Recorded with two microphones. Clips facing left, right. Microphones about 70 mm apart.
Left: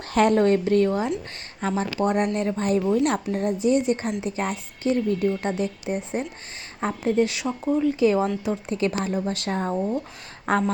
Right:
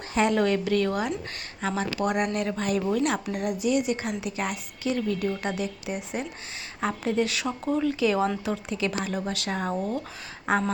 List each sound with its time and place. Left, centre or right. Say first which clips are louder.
0.1 s a sound: left 5 dB; left
0.3 s speech: left 5 dB; left; by 7.9 s centre
7.9 s speech: left 3 dB; left
10.5 s speech: left 2 dB; left